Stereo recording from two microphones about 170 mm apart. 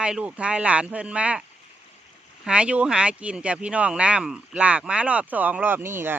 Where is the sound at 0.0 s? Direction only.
5° right (ahead or behind).